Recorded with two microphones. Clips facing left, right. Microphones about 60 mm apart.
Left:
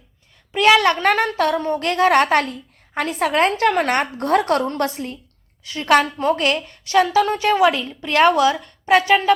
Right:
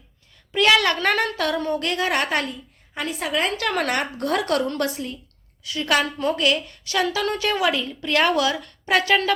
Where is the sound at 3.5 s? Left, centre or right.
Left.